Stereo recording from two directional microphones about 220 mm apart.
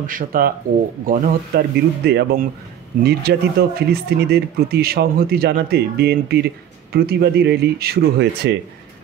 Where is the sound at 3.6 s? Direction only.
45° right (ahead or behind).